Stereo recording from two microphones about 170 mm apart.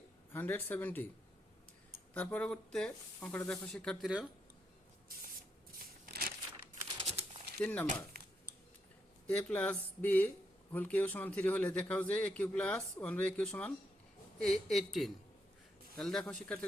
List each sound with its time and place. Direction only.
0.3 s speech: 10° left (ahead or behind)
2.1 s speech: 10° left (ahead or behind)
5.8 s a sound: 60° right (ahead or behind)
7.0 s bird: 40° right (ahead or behind)
7.6 s speech: 10° left (ahead or behind)
9.2 s speech: 10° left (ahead or behind)